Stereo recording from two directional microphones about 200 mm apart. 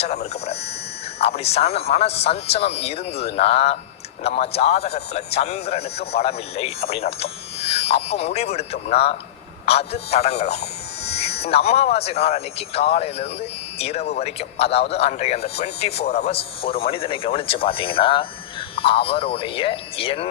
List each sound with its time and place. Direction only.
0.0 s buzzer: 30° left (ahead or behind)
1.2 s speech: 30° left (ahead or behind)